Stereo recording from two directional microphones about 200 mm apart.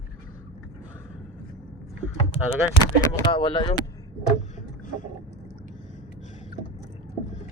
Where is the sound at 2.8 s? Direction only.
15° left (ahead or behind).